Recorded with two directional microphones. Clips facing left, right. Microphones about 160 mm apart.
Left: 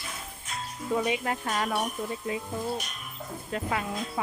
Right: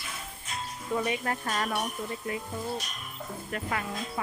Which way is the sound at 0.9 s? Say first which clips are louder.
Left 1 dB; 15° left (ahead or behind).